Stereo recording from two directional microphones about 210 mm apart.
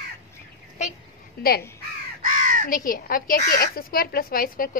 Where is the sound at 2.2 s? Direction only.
40° right (ahead or behind).